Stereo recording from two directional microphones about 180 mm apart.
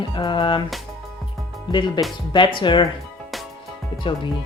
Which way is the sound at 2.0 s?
25° left (ahead or behind).